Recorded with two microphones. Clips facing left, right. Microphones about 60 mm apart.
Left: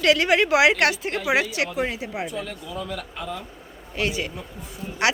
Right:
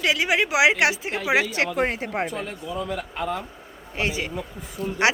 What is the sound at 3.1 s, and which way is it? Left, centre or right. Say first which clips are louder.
Speech: right 7 dB; right.